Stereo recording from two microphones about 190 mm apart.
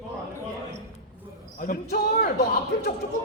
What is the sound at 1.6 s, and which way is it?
Basketball bounce, 45° left (ahead or behind).